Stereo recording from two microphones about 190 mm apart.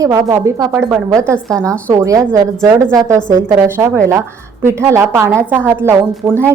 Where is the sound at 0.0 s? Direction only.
15° right (ahead or behind).